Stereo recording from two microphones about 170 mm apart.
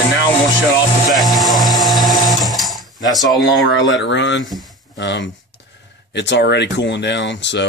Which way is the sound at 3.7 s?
90° left.